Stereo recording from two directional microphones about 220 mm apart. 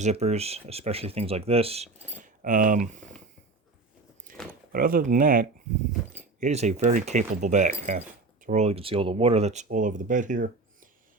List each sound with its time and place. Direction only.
0.0 s speech: 30° right (ahead or behind)
4.3 s a sound: 40° right (ahead or behind)
4.7 s speech: 40° right (ahead or behind)